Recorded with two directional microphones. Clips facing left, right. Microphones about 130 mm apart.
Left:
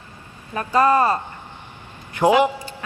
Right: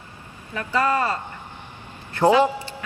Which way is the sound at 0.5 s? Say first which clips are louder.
Left 5 dB; 40° left (ahead or behind).